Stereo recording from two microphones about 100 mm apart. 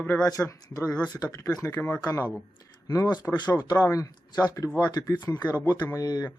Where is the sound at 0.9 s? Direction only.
10° left (ahead or behind).